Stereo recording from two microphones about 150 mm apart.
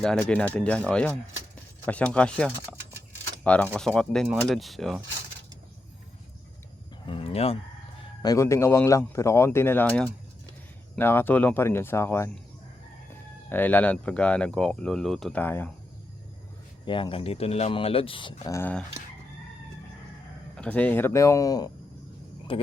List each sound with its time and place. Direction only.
0.0 s speech: 5° left (ahead or behind)
2.7 s a sound: 5° left (ahead or behind)
3.4 s speech: 10° left (ahead or behind)
7.0 s a sound: 35° left (ahead or behind)
8.2 s speech: 20° left (ahead or behind)
13.5 s speech: 10° left (ahead or behind)
16.8 s speech: 35° left (ahead or behind)
18.5 s speech: 10° left (ahead or behind)
20.6 s speech: 10° left (ahead or behind); by 21.7 s 25° left (ahead or behind)
22.5 s speech: 35° left (ahead or behind)